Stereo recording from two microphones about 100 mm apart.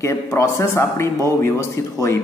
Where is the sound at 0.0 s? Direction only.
30° left (ahead or behind).